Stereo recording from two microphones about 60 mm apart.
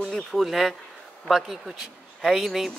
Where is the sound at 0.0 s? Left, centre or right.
Centre.